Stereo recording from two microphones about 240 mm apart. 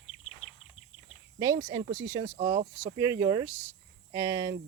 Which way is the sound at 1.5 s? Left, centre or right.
Right.